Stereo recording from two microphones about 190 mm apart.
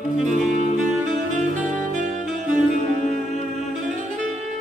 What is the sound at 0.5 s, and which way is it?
Saxophone, 40° right (ahead or behind).